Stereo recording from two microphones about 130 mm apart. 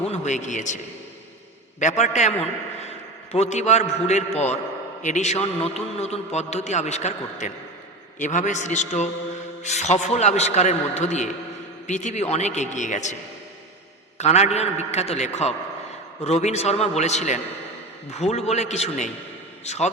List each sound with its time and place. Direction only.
0.0 s a man's voice: 60° left (ahead or behind)
1.8 s a man's voice: 65° left (ahead or behind)
14.2 s a man's voice: 55° left (ahead or behind)